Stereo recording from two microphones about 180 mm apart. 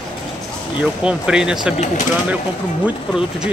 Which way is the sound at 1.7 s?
40° left (ahead or behind).